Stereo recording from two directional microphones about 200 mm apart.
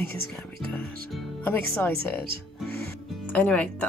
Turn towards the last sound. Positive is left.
turn(degrees=5)  # may be behind; listen again after turning